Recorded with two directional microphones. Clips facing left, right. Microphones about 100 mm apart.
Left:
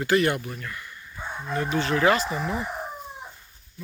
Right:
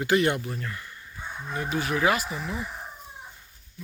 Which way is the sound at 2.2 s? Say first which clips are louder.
Left 5 dB; 65° left (ahead or behind).